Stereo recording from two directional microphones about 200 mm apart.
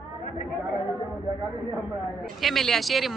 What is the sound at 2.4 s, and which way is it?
Speech, centre (ahead or behind).